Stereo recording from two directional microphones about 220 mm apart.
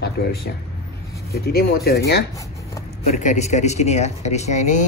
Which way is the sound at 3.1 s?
30° left (ahead or behind).